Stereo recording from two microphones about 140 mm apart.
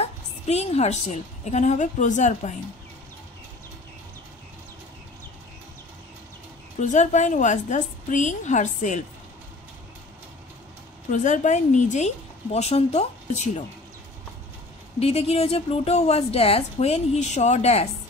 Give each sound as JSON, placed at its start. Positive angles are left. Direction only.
{"t": 0.0, "sound": "a woman's voice", "side_deg": 50}
{"t": 6.8, "sound": "a woman's voice", "side_deg": 60}
{"t": 11.1, "sound": "a woman's voice", "side_deg": 60}
{"t": 15.0, "sound": "a woman's voice", "side_deg": 45}